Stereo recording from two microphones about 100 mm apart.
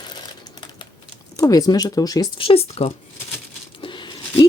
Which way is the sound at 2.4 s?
70° left (ahead or behind).